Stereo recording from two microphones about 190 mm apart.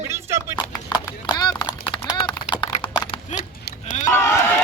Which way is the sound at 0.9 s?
25° left (ahead or behind).